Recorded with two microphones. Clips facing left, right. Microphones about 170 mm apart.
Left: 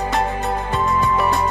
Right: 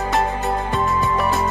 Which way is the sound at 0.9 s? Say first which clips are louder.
Left 4 dB; centre (ahead or behind).